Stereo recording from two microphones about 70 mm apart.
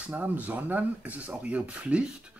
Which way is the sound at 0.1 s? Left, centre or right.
Right.